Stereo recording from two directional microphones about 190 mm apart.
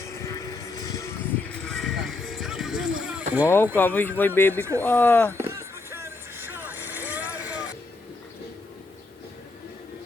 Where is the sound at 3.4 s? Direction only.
10° left (ahead or behind).